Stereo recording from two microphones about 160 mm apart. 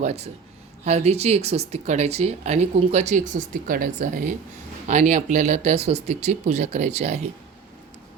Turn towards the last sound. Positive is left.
turn(degrees=-40)  # may be behind; listen again after turning